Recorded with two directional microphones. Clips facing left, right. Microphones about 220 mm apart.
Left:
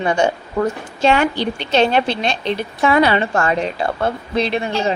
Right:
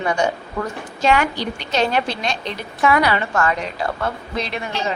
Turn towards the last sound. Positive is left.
turn(degrees=30)  # may be behind; listen again after turning